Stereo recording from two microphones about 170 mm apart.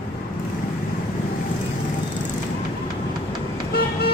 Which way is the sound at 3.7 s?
70° left (ahead or behind).